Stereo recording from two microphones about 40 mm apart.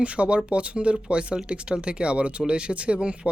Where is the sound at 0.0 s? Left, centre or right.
Right.